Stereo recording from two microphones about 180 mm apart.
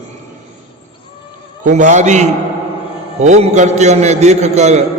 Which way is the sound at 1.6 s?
45° right (ahead or behind).